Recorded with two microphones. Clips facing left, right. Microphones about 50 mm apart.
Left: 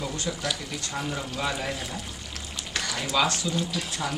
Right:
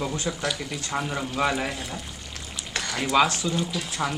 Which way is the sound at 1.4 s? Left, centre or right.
Right.